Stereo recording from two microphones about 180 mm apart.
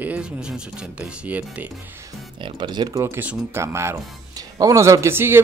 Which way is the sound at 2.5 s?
25° right (ahead or behind).